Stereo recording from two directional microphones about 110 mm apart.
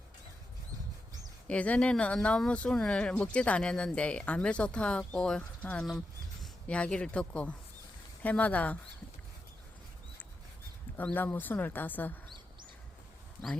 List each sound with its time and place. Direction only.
1.5 s speech: 10° left (ahead or behind)
10.9 s speech: 15° left (ahead or behind)